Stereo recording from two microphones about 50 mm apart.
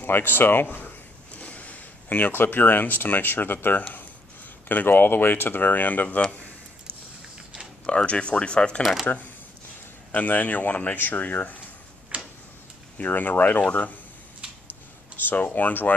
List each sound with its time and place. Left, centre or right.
0.0 s speech: left
1.3 s speech: left
7.8 s speech: left
9.0 s speech: left
12.1 s tick-tock: right
12.9 s speech: left
15.2 s speech: left